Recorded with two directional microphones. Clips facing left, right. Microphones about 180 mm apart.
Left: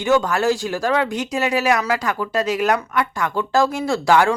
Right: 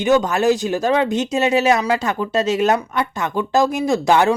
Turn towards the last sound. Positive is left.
turn(degrees=-20)  # may be behind; listen again after turning